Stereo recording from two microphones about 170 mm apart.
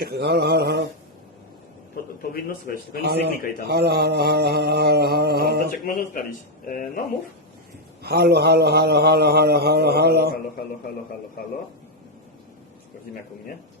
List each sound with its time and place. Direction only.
0.0 s a man's voice: 70° right (ahead or behind)
2.3 s a man's voice: 60° left (ahead or behind)
3.0 s a man's voice: 75° right (ahead or behind)
5.8 s a man's voice: 60° left (ahead or behind)
8.0 s a man's voice: 70° right (ahead or behind)